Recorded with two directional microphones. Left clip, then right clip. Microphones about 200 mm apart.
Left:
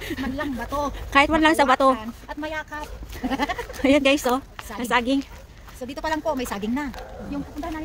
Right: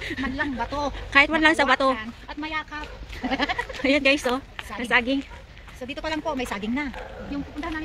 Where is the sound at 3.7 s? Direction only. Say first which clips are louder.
Left 3 dB; 20° left (ahead or behind).